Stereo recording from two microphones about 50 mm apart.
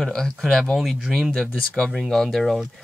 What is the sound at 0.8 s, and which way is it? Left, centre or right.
Speech, centre.